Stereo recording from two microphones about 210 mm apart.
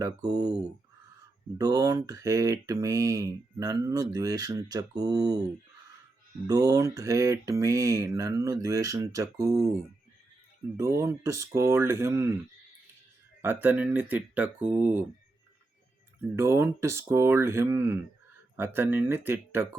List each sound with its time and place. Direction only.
0.0 s speech: 20° right (ahead or behind)
6.5 s speech: 15° right (ahead or behind)
10.8 s speech: 15° right (ahead or behind)
13.4 s speech: 10° right (ahead or behind)
16.3 s speech: 10° right (ahead or behind)